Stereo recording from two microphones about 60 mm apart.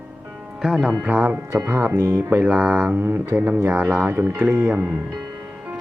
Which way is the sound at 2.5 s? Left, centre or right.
Right.